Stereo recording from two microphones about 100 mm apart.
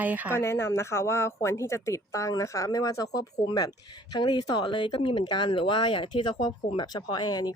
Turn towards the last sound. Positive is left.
turn(degrees=40)  # may be behind; listen again after turning